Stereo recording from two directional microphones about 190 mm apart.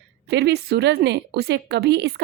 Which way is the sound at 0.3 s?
60° right (ahead or behind).